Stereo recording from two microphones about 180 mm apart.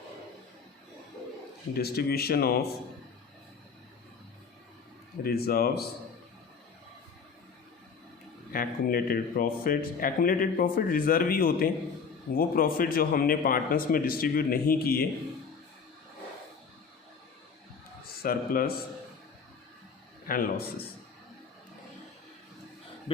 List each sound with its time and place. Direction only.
1.7 s speech: 60° left (ahead or behind)
5.2 s speech: 60° left (ahead or behind)
8.5 s speech: 55° left (ahead or behind)
18.2 s speech: 55° left (ahead or behind)
20.2 s speech: 50° left (ahead or behind)
23.1 s speech: 30° left (ahead or behind)